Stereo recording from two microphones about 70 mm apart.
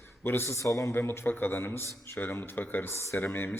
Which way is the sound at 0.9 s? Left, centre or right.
Left.